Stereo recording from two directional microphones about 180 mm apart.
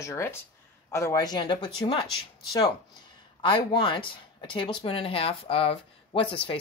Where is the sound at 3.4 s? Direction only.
30° left (ahead or behind).